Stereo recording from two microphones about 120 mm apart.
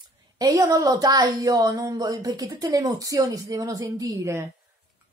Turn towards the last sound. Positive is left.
turn(degrees=-30)  # may be behind; listen again after turning